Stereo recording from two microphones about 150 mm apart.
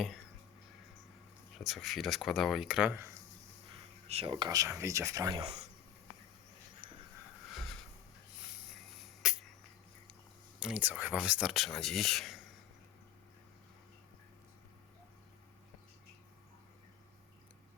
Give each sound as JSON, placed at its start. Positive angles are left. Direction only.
{"t": 1.5, "sound": "speech", "side_deg": 0}
{"t": 4.3, "sound": "speech", "side_deg": -25}
{"t": 5.4, "sound": "speech", "side_deg": -45}
{"t": 6.8, "sound": "a sound", "side_deg": -60}
{"t": 9.2, "sound": "a sound", "side_deg": -5}
{"t": 10.6, "sound": "speech", "side_deg": -10}